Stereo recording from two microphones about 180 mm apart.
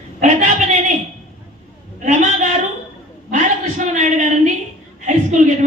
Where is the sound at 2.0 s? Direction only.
45° right (ahead or behind).